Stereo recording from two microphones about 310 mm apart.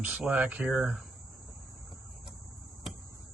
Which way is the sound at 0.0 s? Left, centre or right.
Centre.